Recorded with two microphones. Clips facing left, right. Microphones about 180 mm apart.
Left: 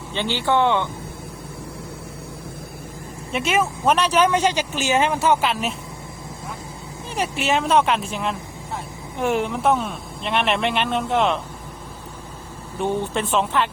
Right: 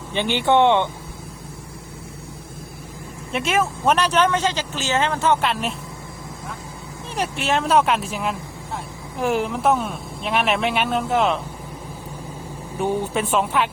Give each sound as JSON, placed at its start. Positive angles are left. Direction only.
{"t": 0.1, "sound": "speech", "side_deg": -15}
{"t": 3.3, "sound": "speech", "side_deg": 0}
{"t": 7.2, "sound": "speech", "side_deg": 0}
{"t": 12.8, "sound": "speech", "side_deg": -10}